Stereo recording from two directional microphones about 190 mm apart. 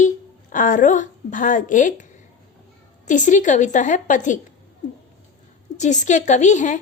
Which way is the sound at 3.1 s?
40° left (ahead or behind).